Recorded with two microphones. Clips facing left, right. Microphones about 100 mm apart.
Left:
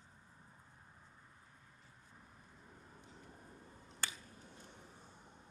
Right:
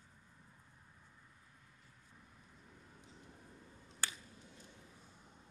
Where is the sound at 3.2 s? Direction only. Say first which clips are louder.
Left 1 dB; 35° left (ahead or behind).